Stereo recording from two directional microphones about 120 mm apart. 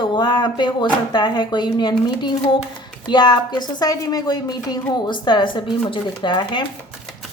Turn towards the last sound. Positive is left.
turn(degrees=40)  # may be behind; listen again after turning